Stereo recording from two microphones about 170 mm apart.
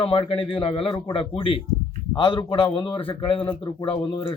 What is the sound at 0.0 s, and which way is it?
A man's voice, 30° left (ahead or behind).